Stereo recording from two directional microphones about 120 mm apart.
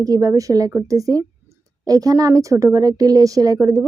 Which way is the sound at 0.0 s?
25° right (ahead or behind).